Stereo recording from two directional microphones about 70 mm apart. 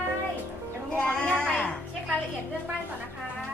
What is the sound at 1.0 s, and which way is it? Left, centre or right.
Child singing, centre.